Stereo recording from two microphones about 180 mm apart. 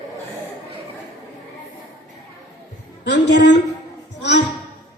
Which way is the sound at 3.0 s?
75° left (ahead or behind).